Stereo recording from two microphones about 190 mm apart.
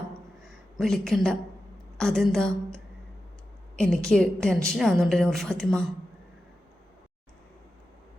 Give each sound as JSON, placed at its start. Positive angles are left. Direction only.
{"t": 0.5, "sound": "a woman's voice", "side_deg": 0}